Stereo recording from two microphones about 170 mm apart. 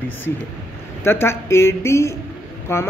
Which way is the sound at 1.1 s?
15° left (ahead or behind).